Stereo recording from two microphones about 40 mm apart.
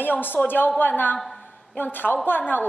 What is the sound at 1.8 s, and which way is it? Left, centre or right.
Speech, left.